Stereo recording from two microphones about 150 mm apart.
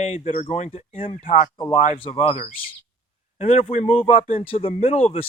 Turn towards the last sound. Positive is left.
turn(degrees=40)  # may be behind; listen again after turning